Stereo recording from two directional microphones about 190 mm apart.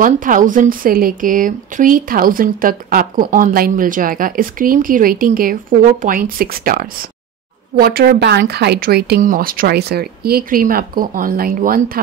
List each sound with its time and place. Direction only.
0.0 s a woman's voice: 45° right (ahead or behind)